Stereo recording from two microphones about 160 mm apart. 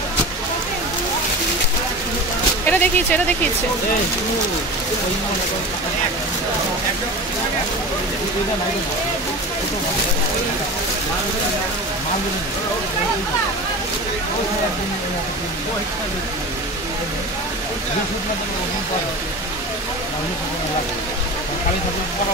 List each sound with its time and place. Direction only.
2.6 s speech: 10° left (ahead or behind)